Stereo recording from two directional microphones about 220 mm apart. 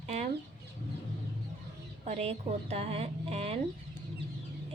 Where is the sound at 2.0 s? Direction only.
30° right (ahead or behind).